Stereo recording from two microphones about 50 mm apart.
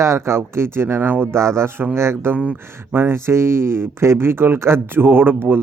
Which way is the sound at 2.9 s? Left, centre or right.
Right.